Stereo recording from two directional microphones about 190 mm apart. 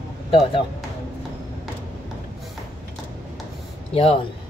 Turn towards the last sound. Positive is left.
turn(degrees=30)  # may be behind; listen again after turning